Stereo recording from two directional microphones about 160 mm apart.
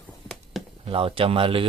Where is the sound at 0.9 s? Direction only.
35° right (ahead or behind).